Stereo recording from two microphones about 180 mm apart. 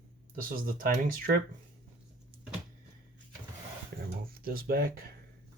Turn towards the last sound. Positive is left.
turn(degrees=-55)  # may be behind; listen again after turning